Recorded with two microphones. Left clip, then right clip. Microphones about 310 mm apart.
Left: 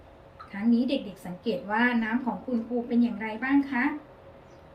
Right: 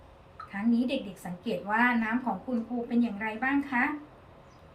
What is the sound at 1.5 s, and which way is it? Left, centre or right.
Speech, centre.